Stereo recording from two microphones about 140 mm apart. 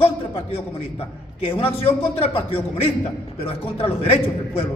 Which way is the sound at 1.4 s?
45° left (ahead or behind).